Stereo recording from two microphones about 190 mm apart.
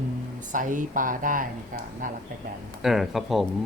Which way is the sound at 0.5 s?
45° right (ahead or behind).